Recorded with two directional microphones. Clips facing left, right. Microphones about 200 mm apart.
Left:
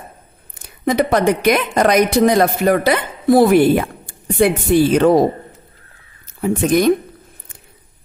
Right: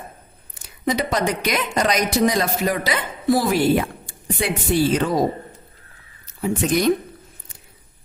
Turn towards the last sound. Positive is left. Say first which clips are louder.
# left 5 dB
turn(degrees=55)  # may be behind; listen again after turning